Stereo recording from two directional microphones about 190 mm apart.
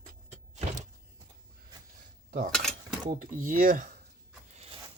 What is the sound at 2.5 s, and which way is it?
Dishes, 5° left (ahead or behind).